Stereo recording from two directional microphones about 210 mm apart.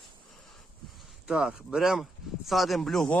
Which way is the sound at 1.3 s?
5° right (ahead or behind).